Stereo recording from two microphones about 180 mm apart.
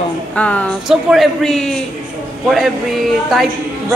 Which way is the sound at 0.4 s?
5° left (ahead or behind).